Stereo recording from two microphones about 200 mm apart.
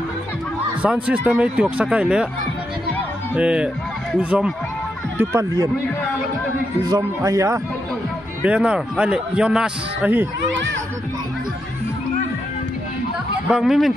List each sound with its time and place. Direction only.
0.8 s speech: 5° right (ahead or behind)
3.3 s a man's voice: 5° right (ahead or behind)
6.8 s speech: 20° right (ahead or behind)
8.5 s a man's voice: 5° right (ahead or behind)
13.5 s a man's voice: centre (ahead or behind)